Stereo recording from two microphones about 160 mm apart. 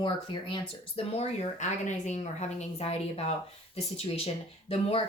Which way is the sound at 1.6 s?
50° left (ahead or behind).